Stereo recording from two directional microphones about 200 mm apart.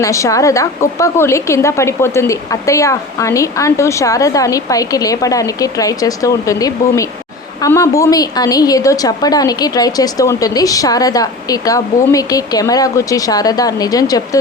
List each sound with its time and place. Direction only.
0.0 s a woman's voice: 15° left (ahead or behind)